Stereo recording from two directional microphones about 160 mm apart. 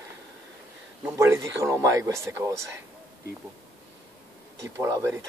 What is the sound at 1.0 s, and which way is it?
Speech, 15° right (ahead or behind).